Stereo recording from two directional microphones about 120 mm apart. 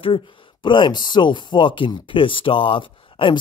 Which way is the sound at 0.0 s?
45° left (ahead or behind).